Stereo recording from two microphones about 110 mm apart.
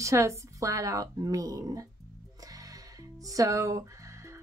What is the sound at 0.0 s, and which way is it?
A woman's voice, 25° right (ahead or behind).